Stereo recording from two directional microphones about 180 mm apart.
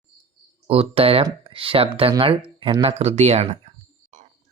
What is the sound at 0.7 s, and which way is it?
Speech, 30° right (ahead or behind).